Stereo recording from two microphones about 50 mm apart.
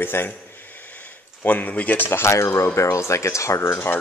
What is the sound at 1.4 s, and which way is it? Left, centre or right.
Speech, left.